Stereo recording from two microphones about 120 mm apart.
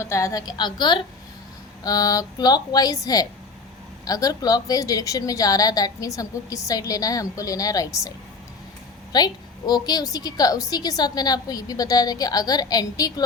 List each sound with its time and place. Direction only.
0.0 s a woman's voice: 25° left (ahead or behind)
9.1 s a woman's voice: 35° left (ahead or behind)